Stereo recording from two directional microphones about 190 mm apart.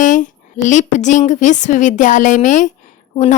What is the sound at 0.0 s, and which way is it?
A woman's voice, 40° left (ahead or behind).